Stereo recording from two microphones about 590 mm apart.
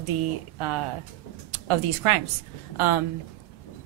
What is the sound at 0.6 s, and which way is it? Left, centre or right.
Speech, right.